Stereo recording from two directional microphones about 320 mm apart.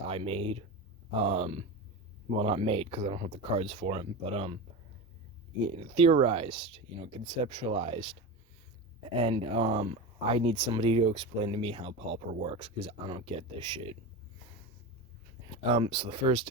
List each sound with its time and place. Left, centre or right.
0.1 s speech: centre
5.5 s speech: centre
9.1 s speech: centre
15.7 s speech: centre